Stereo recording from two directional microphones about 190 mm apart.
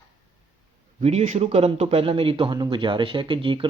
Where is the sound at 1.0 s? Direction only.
35° right (ahead or behind).